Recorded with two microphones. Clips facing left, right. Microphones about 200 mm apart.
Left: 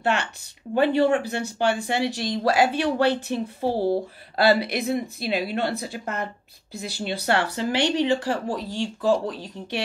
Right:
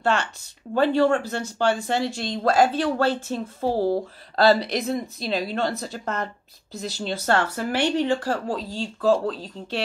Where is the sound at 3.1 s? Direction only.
70° left (ahead or behind).